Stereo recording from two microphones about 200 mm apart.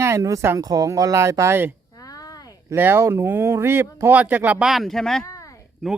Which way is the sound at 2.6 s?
10° right (ahead or behind).